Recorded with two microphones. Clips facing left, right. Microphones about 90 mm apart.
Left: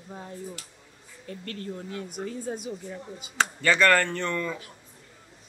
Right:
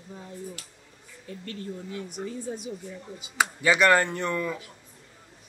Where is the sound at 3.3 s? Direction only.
15° right (ahead or behind).